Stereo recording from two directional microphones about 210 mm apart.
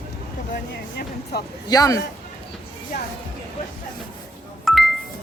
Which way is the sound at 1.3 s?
50° left (ahead or behind).